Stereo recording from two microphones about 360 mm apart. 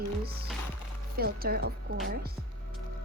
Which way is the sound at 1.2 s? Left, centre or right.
Right.